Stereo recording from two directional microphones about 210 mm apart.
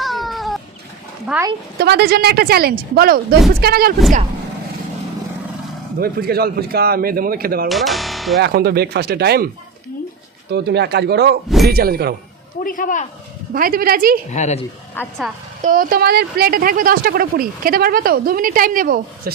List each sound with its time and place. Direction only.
0.0 s a sound: centre (ahead or behind)
1.3 s speech: 15° right (ahead or behind)
1.8 s speech: 50° right (ahead or behind)
6.0 s speech: 45° right (ahead or behind)
7.7 s speech: centre (ahead or behind)
8.4 s speech: 50° right (ahead or behind)
10.5 s speech: 50° right (ahead or behind)
11.4 s speech: centre (ahead or behind)
11.7 s speech: 45° right (ahead or behind)
12.6 s speech: 40° left (ahead or behind)
13.5 s speech: 45° right (ahead or behind)
14.3 s speech: 35° left (ahead or behind)
15.0 s a woman's voice: 10° left (ahead or behind)
15.6 s speech: 40° right (ahead or behind)